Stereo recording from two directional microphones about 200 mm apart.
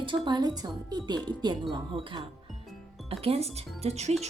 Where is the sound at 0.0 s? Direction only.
25° right (ahead or behind).